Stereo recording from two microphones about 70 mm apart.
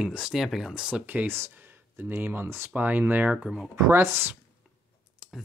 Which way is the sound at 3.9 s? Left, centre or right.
Right.